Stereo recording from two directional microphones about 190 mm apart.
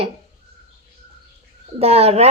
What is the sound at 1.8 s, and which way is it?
Speech, 30° right (ahead or behind).